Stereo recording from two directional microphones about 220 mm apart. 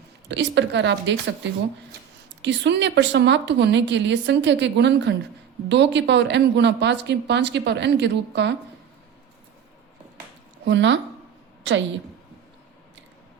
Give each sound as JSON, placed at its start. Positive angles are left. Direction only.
{"t": 0.3, "sound": "speech", "side_deg": -55}
{"t": 2.4, "sound": "speech", "side_deg": -55}
{"t": 10.7, "sound": "a woman's voice", "side_deg": -55}